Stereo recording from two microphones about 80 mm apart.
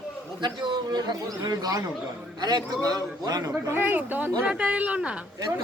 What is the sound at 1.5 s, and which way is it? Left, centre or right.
A man's voice, right.